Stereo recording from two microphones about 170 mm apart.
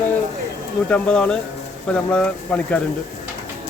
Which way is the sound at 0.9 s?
5° left (ahead or behind).